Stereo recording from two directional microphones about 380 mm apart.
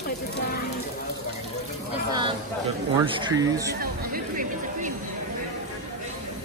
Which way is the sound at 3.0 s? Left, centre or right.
Centre.